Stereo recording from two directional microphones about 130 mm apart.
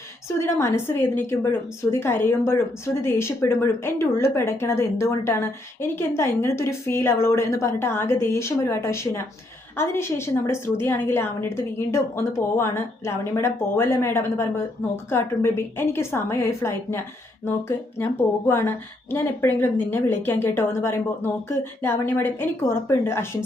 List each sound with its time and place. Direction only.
0.4 s a woman's voice: 20° left (ahead or behind)